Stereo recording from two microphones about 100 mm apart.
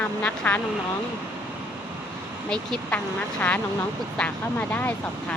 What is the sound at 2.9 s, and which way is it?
Speech, 15° left (ahead or behind).